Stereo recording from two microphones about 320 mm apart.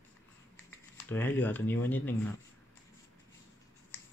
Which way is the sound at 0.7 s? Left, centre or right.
Centre.